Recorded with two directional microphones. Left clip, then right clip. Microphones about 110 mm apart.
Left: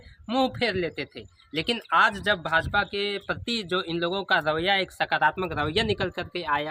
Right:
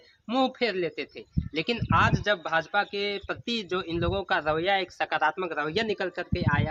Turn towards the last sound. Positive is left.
turn(degrees=35)  # may be behind; listen again after turning